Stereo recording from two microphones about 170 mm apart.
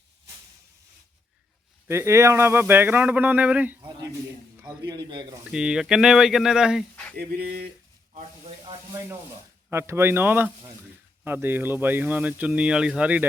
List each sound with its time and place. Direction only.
1.9 s speech: 15° right (ahead or behind)
4.5 s a sound: 15° right (ahead or behind)
4.9 s speech: 25° right (ahead or behind)
5.5 s speech: 5° right (ahead or behind)
7.2 s speech: 65° right (ahead or behind)
8.1 s a sound: 35° right (ahead or behind)
9.6 s speech: 15° right (ahead or behind)